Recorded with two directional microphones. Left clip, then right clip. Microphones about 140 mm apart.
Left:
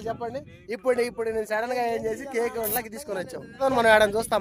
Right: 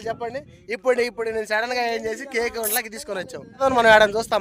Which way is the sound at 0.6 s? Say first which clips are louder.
Right 4 dB; centre (ahead or behind).